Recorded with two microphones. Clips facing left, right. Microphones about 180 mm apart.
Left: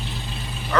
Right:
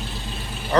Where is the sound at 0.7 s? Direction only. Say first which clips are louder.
Right 4 dB; 35° right (ahead or behind).